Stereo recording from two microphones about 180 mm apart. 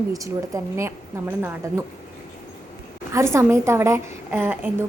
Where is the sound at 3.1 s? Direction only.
15° right (ahead or behind).